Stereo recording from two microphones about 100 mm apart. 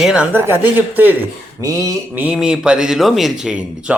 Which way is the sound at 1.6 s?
35° right (ahead or behind).